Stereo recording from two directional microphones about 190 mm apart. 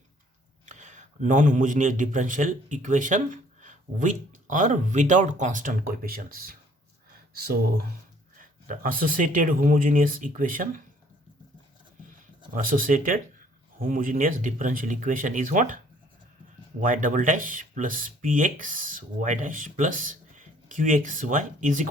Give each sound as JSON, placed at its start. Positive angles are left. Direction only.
{"t": 0.6, "sound": "a man's voice", "side_deg": -40}
{"t": 12.5, "sound": "speech", "side_deg": -45}
{"t": 16.8, "sound": "speech", "side_deg": -45}